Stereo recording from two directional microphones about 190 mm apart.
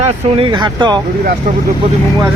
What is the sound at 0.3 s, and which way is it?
Speech, 25° right (ahead or behind).